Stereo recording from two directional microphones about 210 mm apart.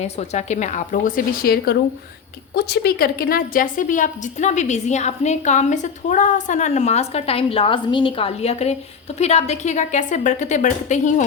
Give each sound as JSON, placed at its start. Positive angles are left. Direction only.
{"t": 0.0, "sound": "a woman's voice", "side_deg": 35}